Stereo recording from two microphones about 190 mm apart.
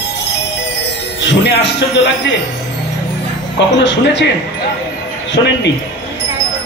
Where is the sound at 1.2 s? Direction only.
70° left (ahead or behind).